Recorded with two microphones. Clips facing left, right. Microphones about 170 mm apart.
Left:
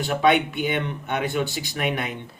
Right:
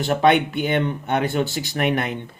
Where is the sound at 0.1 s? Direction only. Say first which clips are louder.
Right 3 dB; 50° right (ahead or behind).